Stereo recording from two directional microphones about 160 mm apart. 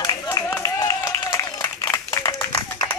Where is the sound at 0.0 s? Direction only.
20° left (ahead or behind).